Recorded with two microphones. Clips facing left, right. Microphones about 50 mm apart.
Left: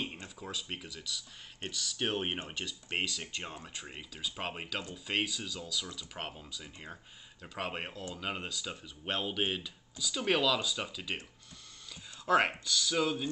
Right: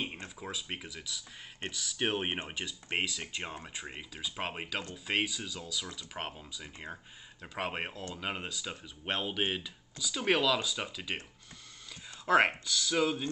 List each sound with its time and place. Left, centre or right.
0.7 s speech: centre
12.3 s speech: centre